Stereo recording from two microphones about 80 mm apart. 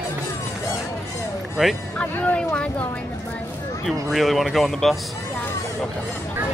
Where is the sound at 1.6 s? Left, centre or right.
Centre.